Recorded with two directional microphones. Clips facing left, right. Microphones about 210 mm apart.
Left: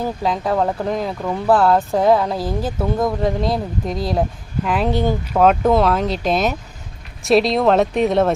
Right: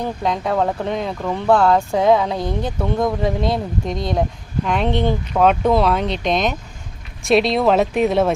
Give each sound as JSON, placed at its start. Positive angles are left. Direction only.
{"t": 0.0, "sound": "speech", "side_deg": 0}